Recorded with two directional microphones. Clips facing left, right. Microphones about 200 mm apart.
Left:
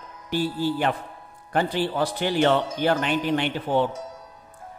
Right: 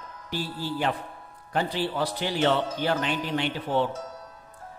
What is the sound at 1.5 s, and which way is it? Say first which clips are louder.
A man's voice: left 3 dB; 55° left (ahead or behind).